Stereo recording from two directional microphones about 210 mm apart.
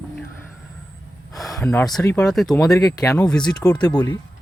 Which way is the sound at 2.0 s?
5° left (ahead or behind).